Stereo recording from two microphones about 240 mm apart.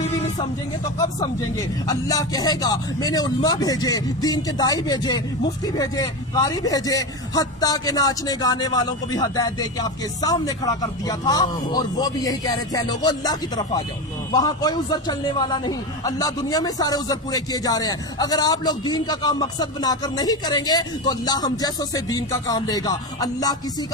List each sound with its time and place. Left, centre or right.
0.9 s a man's voice: centre